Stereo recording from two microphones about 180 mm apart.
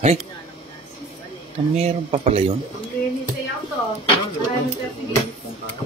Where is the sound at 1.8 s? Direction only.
35° right (ahead or behind).